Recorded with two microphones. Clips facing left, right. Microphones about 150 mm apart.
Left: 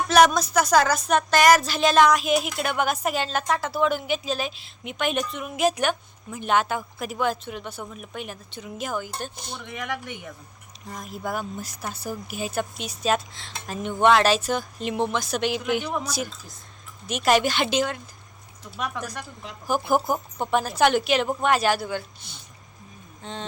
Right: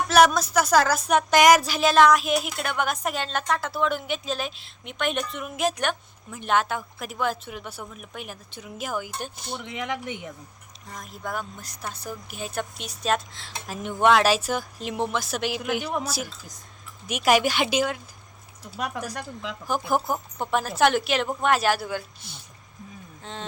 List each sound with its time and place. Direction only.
0.1 s music: 5° right (ahead or behind)
9.6 s speech: 20° right (ahead or behind)
10.8 s music: 5° left (ahead or behind)
17.1 s speech: 10° right (ahead or behind)
19.6 s music: 5° left (ahead or behind)
23.2 s music: centre (ahead or behind)